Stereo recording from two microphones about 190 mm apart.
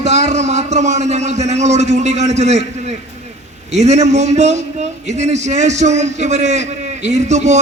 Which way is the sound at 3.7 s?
35° right (ahead or behind).